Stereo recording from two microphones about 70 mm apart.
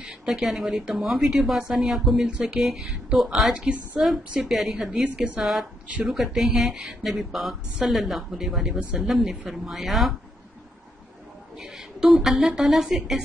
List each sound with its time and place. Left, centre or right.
0.0 s a woman's voice: centre
5.0 s a woman's voice: right
5.4 s a woman's voice: centre
11.6 s a woman's voice: centre